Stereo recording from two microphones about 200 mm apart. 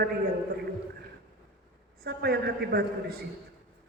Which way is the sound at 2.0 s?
50° right (ahead or behind).